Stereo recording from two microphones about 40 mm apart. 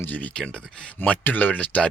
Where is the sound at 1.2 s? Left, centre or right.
Left.